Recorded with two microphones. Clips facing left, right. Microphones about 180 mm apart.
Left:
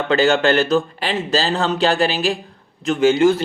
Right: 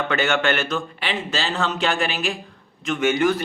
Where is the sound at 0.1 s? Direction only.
30° left (ahead or behind).